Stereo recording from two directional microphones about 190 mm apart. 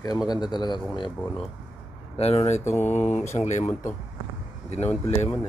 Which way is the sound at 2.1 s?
35° left (ahead or behind).